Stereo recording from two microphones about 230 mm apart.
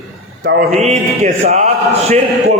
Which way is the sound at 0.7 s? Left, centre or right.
Right.